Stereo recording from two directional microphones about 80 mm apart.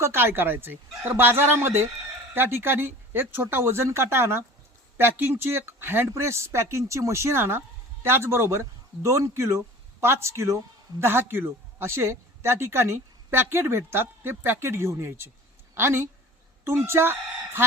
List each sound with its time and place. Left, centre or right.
0.0 s a woman's voice: right